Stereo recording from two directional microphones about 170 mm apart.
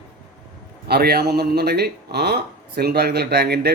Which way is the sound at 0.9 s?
70° right (ahead or behind).